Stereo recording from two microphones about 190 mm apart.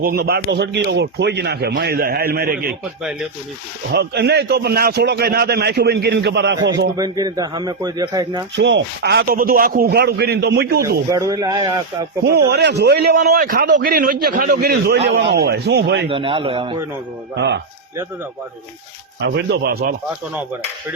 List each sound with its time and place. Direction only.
0.0 s a man's voice: 50° right (ahead or behind)
3.0 s speech: centre (ahead or behind)
3.9 s a man's voice: 60° right (ahead or behind)
6.9 s a man's voice: 20° right (ahead or behind)
8.5 s a man's voice: 70° right (ahead or behind); by 10.8 s 55° right (ahead or behind)
10.8 s a man's voice: 20° right (ahead or behind)
12.2 s a man's voice: 60° right (ahead or behind)
16.0 s a man's voice: 30° right (ahead or behind)
19.2 s a man's voice: 65° right (ahead or behind)